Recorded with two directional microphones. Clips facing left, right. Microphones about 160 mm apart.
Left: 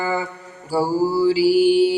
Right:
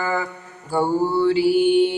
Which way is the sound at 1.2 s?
30° left (ahead or behind).